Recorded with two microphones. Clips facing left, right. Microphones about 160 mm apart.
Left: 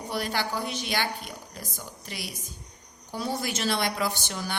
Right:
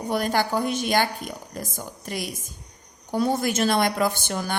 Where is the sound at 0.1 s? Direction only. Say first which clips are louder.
Right 7 dB; 50° right (ahead or behind).